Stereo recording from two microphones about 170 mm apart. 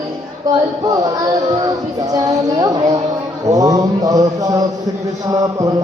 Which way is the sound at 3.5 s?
20° right (ahead or behind).